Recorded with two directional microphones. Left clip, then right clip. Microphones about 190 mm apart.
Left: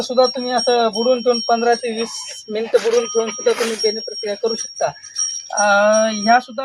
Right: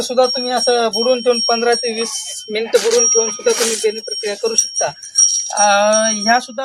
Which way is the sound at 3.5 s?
20° right (ahead or behind).